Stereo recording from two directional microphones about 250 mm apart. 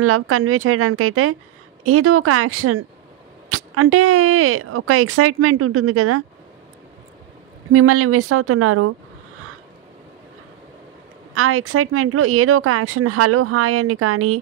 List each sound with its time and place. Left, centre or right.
0.0 s speech: right
7.7 s speech: right
11.3 s speech: right